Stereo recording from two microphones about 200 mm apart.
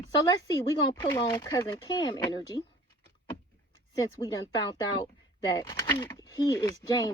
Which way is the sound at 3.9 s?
15° left (ahead or behind).